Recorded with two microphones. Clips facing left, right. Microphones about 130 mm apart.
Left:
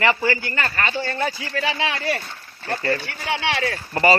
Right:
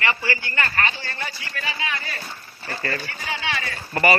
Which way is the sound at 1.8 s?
90° left.